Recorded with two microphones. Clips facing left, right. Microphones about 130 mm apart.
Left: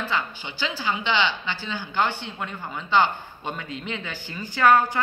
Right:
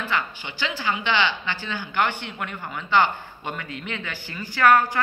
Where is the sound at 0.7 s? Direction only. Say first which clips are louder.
Right 1 dB; 10° left (ahead or behind).